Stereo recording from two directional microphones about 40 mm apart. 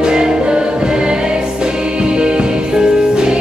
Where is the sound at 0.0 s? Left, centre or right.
Centre.